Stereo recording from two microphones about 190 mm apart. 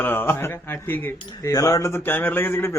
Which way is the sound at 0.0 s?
10° left (ahead or behind).